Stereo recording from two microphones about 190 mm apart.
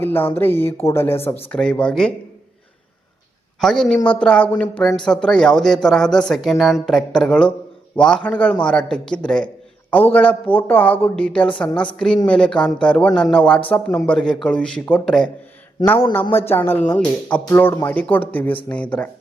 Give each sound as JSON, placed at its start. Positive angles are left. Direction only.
{"t": 0.0, "sound": "speech", "side_deg": 10}
{"t": 3.6, "sound": "speech", "side_deg": 0}
{"t": 15.9, "sound": "speech", "side_deg": 15}